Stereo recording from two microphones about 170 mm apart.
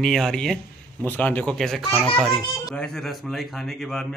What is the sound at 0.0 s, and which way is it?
A man's voice, centre (ahead or behind).